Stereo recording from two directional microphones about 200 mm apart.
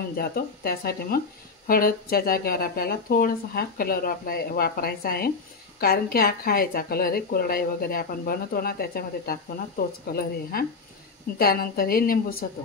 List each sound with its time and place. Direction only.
0.1 s speech: 50° left (ahead or behind)